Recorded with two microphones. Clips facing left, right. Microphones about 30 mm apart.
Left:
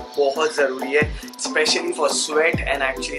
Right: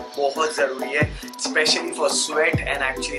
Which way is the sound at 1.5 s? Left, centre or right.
Centre.